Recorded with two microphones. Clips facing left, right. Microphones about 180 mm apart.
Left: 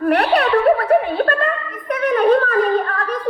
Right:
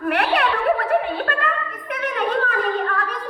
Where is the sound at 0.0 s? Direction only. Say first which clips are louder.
Left 5 dB; 40° left (ahead or behind).